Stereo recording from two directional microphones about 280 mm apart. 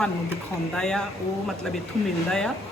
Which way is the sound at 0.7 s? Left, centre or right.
Centre.